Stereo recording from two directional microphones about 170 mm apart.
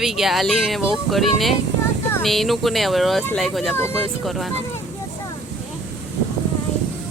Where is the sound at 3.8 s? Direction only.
15° left (ahead or behind).